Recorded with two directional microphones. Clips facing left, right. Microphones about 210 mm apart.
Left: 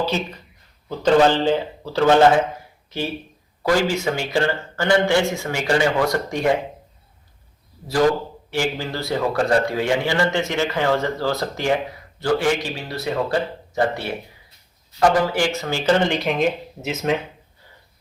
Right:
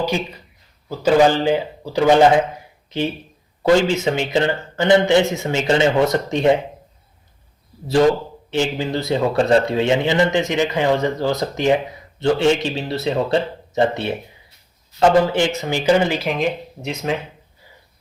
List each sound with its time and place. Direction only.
0.0 s speech: 15° right (ahead or behind)
8.4 s speech: 20° right (ahead or behind); by 17.2 s centre (ahead or behind)